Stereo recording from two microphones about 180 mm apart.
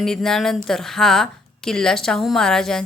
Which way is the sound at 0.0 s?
5° left (ahead or behind).